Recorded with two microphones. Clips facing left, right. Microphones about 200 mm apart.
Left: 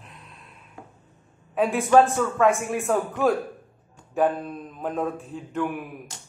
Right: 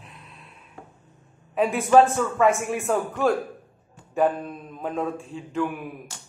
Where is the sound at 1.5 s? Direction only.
Centre (ahead or behind).